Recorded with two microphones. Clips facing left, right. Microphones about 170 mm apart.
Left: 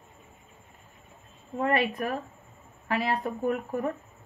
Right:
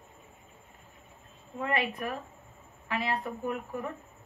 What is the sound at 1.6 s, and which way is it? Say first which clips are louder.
Speech: left 5 dB; 45° left (ahead or behind).